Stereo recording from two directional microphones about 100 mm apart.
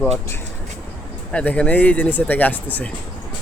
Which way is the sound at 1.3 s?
10° left (ahead or behind).